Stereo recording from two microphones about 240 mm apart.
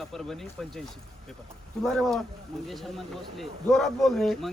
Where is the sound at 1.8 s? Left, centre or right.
Centre.